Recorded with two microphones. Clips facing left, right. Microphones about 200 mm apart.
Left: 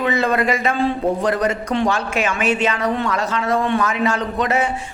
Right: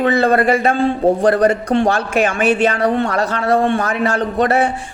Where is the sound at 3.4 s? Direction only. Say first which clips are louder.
Right 3 dB; 35° right (ahead or behind).